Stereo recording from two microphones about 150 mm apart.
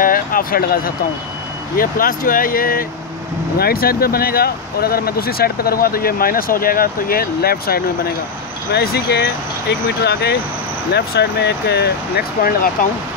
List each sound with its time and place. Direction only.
0.0 s speech: 70° left (ahead or behind)
3.5 s speech: 90° left